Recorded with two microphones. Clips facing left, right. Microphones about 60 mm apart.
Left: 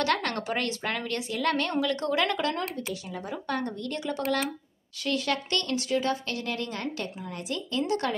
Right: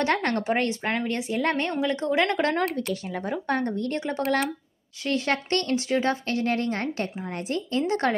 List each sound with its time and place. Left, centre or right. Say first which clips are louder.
0.0 s a woman's voice: right 3 dB; right
2.9 s speech: right 6 dB; right
3.4 s speech: right 4 dB; right